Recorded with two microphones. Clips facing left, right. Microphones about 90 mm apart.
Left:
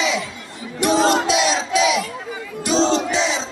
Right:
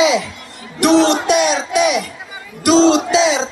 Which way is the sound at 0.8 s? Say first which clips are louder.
Right 4 dB; 65° right (ahead or behind).